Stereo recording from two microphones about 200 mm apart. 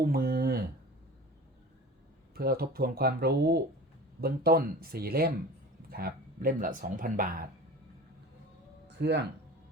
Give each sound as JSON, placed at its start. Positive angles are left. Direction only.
{"t": 0.0, "sound": "a sound", "side_deg": -50}
{"t": 2.3, "sound": "speech", "side_deg": -50}
{"t": 8.9, "sound": "speech", "side_deg": -60}